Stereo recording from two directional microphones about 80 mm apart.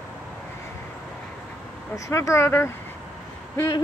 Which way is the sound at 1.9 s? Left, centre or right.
Left.